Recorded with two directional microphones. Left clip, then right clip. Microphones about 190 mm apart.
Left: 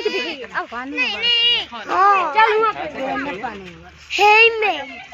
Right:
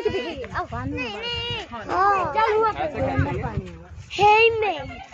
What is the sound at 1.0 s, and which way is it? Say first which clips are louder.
Speech: left 13 dB; 40° right (ahead or behind).